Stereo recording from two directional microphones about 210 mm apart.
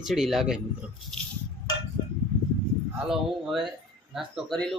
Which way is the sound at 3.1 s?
Centre (ahead or behind).